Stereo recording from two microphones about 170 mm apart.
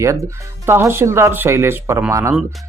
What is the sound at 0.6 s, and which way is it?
A man's voice, 15° right (ahead or behind).